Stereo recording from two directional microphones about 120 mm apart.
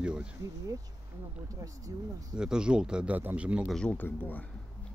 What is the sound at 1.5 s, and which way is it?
Speech, 30° right (ahead or behind).